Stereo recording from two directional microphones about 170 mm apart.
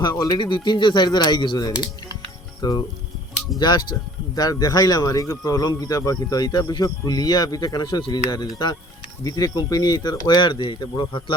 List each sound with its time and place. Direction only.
0.0 s speech: 25° left (ahead or behind)